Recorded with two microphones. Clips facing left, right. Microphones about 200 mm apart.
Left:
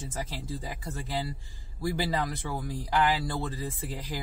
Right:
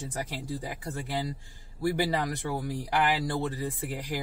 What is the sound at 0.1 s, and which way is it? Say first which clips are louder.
Speech: right 1 dB; 15° right (ahead or behind).